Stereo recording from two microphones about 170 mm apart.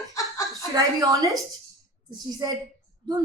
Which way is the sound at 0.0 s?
20° left (ahead or behind).